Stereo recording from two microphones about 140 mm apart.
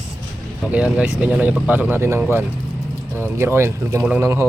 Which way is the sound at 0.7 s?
10° right (ahead or behind).